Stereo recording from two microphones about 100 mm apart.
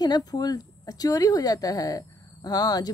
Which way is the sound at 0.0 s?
40° left (ahead or behind).